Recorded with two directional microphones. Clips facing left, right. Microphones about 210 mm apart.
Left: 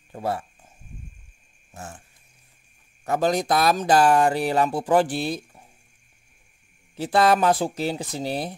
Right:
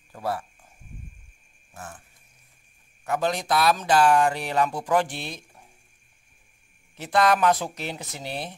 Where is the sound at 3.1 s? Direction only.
40° left (ahead or behind).